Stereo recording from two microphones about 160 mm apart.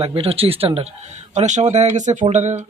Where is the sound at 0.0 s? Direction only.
35° right (ahead or behind).